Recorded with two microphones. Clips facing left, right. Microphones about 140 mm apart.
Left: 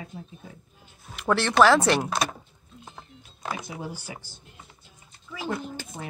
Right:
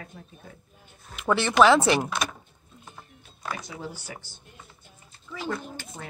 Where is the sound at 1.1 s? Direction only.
Centre (ahead or behind).